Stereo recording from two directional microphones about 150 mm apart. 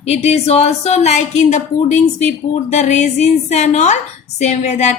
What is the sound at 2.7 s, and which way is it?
A woman's voice, 50° left (ahead or behind).